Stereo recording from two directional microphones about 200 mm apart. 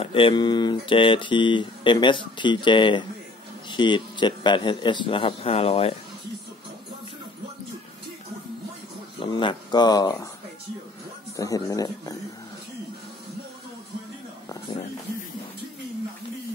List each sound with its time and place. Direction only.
0.0 s speech: 25° left (ahead or behind)
9.2 s speech: 25° left (ahead or behind)
11.3 s speech: 15° left (ahead or behind)